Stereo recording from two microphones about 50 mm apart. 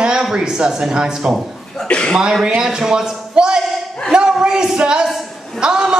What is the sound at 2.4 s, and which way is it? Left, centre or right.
Speech, centre.